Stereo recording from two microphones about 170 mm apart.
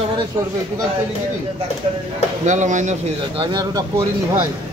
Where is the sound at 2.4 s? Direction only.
45° right (ahead or behind).